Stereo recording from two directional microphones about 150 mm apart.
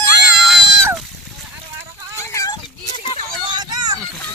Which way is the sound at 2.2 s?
20° left (ahead or behind).